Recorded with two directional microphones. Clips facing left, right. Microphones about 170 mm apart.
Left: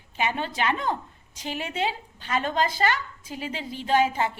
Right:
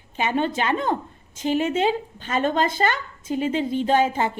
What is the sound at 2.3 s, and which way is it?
A woman's voice, 20° right (ahead or behind).